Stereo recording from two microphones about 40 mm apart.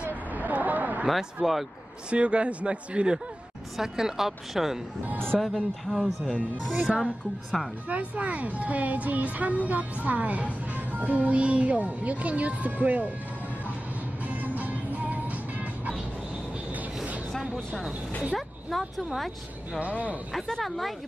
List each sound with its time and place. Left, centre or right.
0.0 s a sound: right
1.0 s speech: centre
2.0 s speech: right
3.7 s speech: centre
5.4 s speech: centre
7.9 s a woman's voice: right
14.2 s music: right
16.7 s vehicle: right
17.6 s a sound: centre
18.3 s speech: centre